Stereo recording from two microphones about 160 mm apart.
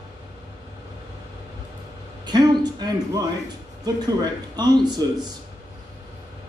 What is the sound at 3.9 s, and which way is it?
Speech, 25° right (ahead or behind).